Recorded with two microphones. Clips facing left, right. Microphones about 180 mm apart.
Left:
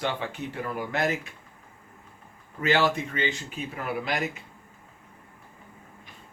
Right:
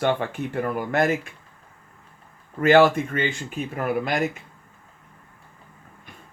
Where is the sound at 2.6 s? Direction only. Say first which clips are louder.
Right 8 dB; 50° right (ahead or behind).